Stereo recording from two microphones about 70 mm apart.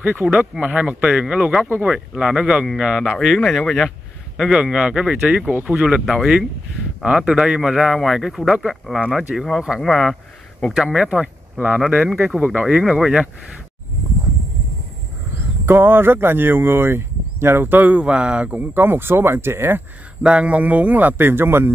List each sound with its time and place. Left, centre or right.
0.0 s speech: right
2.1 s a man's voice: centre
12.4 s speech: centre
15.6 s speech: right
20.2 s speech: centre; by 21.7 s right